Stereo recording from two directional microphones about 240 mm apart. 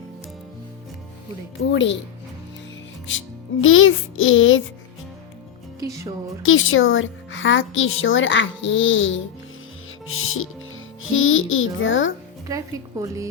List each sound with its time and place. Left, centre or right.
1.5 s a woman's voice: left
3.1 s speech: left
5.8 s a woman's voice: centre
6.4 s a woman's voice: left
12.5 s a woman's voice: centre